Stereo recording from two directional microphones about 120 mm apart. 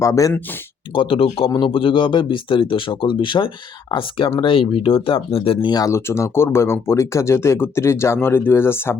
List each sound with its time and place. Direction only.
0.0 s speech: 25° left (ahead or behind)
0.9 s speech: 50° left (ahead or behind)
5.6 s speech: 30° left (ahead or behind)